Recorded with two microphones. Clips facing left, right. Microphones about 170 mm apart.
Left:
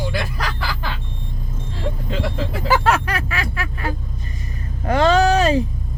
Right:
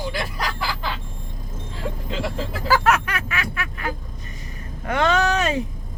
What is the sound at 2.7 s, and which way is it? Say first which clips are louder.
Vehicle: left 1 dB; 30° left (ahead or behind).